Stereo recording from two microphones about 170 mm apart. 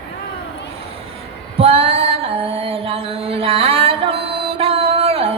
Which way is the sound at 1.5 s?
35° right (ahead or behind).